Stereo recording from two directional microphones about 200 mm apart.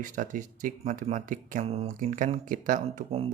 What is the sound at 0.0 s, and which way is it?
Speech, 40° right (ahead or behind).